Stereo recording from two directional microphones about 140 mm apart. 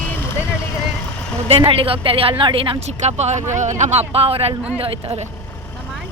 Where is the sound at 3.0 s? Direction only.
55° right (ahead or behind).